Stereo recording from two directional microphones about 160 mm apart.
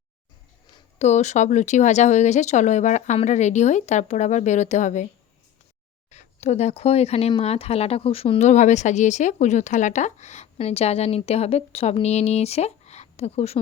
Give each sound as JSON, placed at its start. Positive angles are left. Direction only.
{"t": 0.9, "sound": "speech", "side_deg": 45}
{"t": 6.1, "sound": "speech", "side_deg": 45}